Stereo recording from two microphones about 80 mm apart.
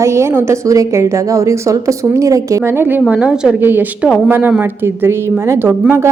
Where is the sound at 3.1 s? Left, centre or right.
Centre.